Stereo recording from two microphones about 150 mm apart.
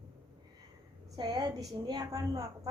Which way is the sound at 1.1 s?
25° right (ahead or behind).